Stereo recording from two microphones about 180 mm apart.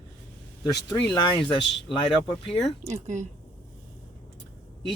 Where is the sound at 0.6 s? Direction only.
25° left (ahead or behind).